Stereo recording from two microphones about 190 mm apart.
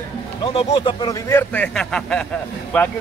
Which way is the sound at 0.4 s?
30° left (ahead or behind).